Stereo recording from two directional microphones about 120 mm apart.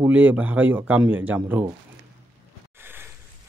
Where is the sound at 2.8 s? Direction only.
15° right (ahead or behind).